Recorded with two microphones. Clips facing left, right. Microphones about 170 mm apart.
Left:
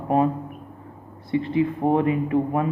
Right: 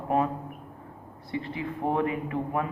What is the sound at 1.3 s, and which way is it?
Speech, 20° left (ahead or behind).